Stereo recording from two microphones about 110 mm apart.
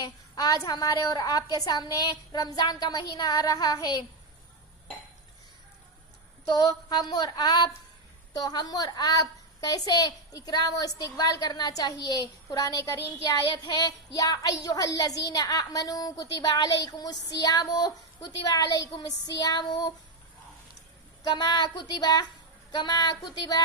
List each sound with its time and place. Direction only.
0.0 s a child's voice: 35° left (ahead or behind)
6.4 s a child's voice: 35° left (ahead or behind)
21.2 s a child's voice: 40° left (ahead or behind)